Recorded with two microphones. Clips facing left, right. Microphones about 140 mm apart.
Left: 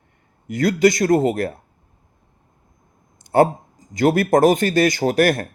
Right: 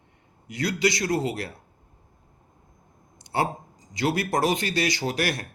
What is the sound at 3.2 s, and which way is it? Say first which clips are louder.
Speech: left 11 dB; 50° left (ahead or behind).